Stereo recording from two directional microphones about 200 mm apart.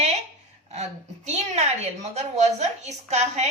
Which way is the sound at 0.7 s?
35° right (ahead or behind).